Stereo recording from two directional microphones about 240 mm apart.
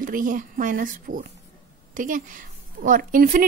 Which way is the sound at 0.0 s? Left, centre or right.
Right.